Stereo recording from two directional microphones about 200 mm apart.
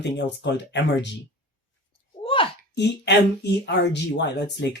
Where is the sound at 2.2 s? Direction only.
25° left (ahead or behind).